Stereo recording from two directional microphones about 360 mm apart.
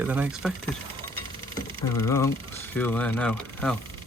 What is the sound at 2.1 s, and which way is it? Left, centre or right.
Speech, centre.